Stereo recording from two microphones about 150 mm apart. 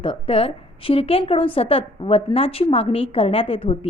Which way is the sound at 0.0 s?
35° left (ahead or behind).